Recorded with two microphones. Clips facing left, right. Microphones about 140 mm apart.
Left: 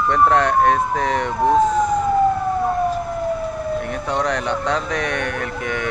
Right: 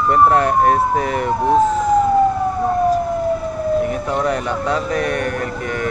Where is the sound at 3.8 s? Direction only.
5° right (ahead or behind).